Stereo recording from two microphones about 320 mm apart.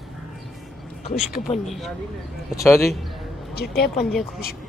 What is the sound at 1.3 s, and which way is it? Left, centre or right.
Speech, left.